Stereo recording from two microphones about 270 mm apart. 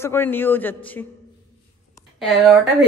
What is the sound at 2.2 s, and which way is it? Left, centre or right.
Speech, centre.